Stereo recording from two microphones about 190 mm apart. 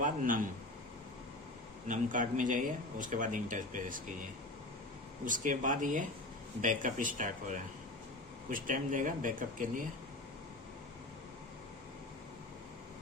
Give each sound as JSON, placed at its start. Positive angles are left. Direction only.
{"t": 0.0, "sound": "speech", "side_deg": -45}
{"t": 1.9, "sound": "speech", "side_deg": -40}